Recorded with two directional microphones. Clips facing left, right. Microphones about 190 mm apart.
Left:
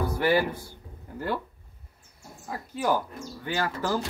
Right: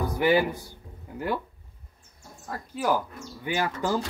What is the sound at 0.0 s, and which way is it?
Speech, 15° right (ahead or behind).